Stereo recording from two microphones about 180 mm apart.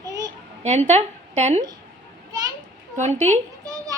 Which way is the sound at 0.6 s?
40° right (ahead or behind).